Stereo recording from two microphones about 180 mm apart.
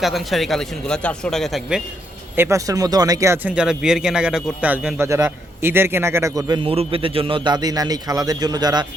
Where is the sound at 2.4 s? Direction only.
15° right (ahead or behind).